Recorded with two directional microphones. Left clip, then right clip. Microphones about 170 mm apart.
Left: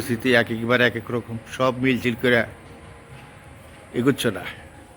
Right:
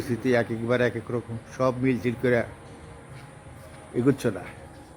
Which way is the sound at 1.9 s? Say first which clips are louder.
Left 4 dB; 90° left.